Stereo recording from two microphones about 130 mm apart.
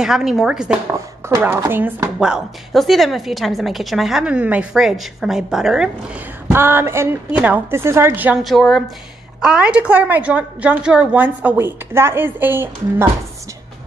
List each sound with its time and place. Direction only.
0.0 s a woman's voice: 5° right (ahead or behind)
1.3 s a woman's voice: 15° right (ahead or behind)
2.1 s a woman's voice: 5° right (ahead or behind)
6.5 s a woman's voice: 20° right (ahead or behind)
8.5 s a woman's voice: centre (ahead or behind); by 13.1 s 15° right (ahead or behind)